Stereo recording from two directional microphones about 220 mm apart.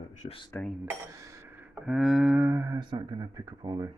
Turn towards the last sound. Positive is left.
turn(degrees=-20)  # may be behind; listen again after turning